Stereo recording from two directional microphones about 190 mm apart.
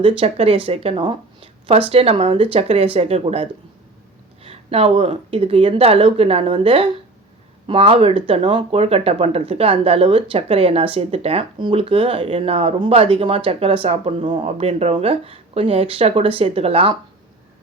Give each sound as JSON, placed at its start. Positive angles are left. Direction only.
{"t": 0.0, "sound": "speech", "side_deg": -30}